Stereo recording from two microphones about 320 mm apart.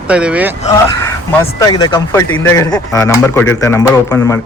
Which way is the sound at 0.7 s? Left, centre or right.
Centre.